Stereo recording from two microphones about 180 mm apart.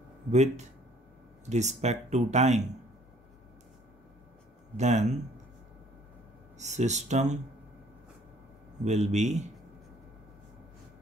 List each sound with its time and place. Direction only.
0.3 s speech: 40° right (ahead or behind)
4.7 s speech: 40° right (ahead or behind)
6.6 s speech: 40° right (ahead or behind)
8.8 s speech: 40° right (ahead or behind)